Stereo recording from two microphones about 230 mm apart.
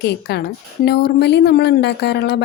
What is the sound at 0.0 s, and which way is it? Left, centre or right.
A woman's voice, left.